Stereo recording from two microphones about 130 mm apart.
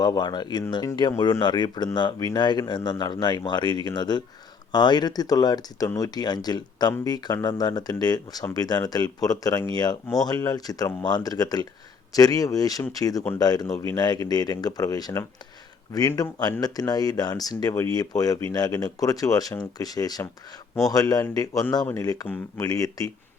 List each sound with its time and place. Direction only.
0.0 s speech: 35° left (ahead or behind)